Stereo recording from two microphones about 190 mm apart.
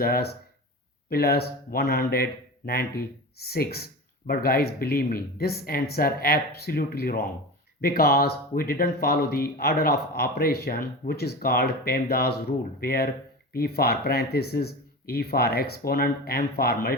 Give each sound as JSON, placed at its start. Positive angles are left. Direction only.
{"t": 0.0, "sound": "speech", "side_deg": 55}